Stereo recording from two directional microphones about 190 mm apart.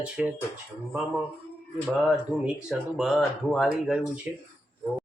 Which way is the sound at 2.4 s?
Centre (ahead or behind).